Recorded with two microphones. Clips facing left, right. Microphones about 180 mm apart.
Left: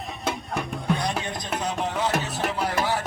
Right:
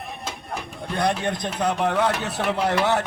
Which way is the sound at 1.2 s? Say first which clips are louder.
Right 5 dB; 60° right (ahead or behind).